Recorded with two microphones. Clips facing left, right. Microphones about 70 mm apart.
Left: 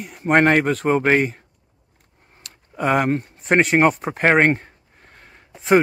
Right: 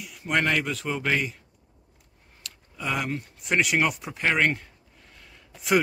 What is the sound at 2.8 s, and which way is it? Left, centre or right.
Speech, left.